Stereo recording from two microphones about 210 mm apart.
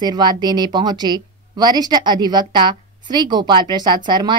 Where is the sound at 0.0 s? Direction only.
20° right (ahead or behind).